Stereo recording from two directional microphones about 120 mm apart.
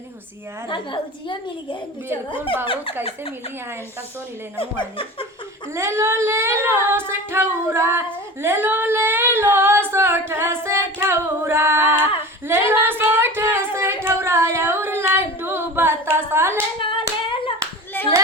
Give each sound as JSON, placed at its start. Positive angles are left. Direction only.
{"t": 0.7, "sound": "a woman's voice", "side_deg": 40}
{"t": 4.5, "sound": "a woman's voice", "side_deg": 50}
{"t": 5.7, "sound": "singing", "side_deg": -20}
{"t": 12.5, "sound": "a sound", "side_deg": -20}
{"t": 15.4, "sound": "singing", "side_deg": -20}
{"t": 16.8, "sound": "hands", "side_deg": 45}